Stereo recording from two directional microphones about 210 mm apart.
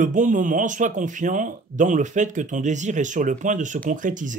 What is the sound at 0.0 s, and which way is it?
Speech, 35° right (ahead or behind).